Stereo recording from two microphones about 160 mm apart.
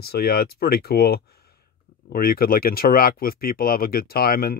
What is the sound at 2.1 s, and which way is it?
Speech, 65° left (ahead or behind).